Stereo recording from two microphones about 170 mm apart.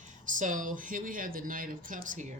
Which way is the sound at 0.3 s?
50° right (ahead or behind).